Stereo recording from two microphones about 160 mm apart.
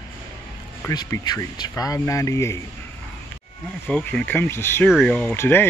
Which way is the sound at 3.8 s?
5° left (ahead or behind).